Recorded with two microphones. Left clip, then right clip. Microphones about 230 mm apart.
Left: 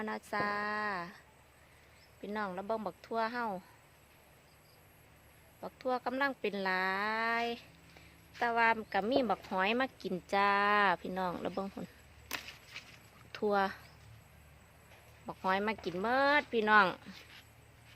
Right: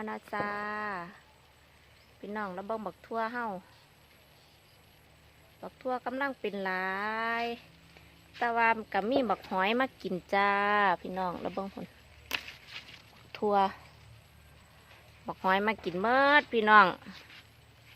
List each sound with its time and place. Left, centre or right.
0.0 s a woman's voice: centre
2.2 s speech: centre
5.5 s speech: centre
12.3 s a sound: centre
13.3 s speech: centre
15.3 s speech: centre